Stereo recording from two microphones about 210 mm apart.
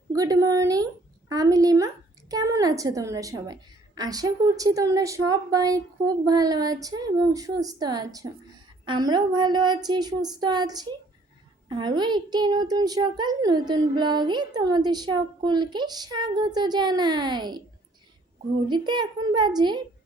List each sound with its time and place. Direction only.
0.1 s a woman's voice: 15° right (ahead or behind)
18.7 s a child's voice: 20° right (ahead or behind)